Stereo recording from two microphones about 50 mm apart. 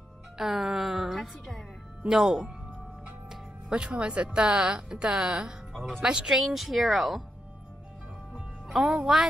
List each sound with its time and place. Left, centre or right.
0.4 s speech: centre
2.0 s speech: centre
5.7 s music: centre
6.0 s speech: centre
8.3 s music: centre
9.1 s speech: centre